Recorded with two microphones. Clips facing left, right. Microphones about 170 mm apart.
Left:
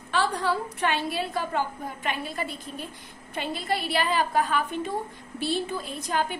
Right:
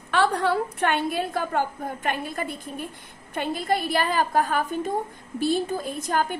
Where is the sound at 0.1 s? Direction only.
60° right (ahead or behind).